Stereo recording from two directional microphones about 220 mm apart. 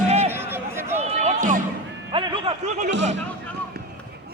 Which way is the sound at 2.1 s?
25° right (ahead or behind).